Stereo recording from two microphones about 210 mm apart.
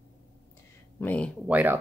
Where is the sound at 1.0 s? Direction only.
5° left (ahead or behind).